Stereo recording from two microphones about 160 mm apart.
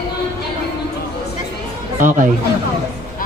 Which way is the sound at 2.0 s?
50° right (ahead or behind).